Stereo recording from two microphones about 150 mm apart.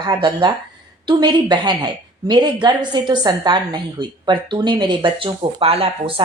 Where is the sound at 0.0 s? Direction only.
30° right (ahead or behind).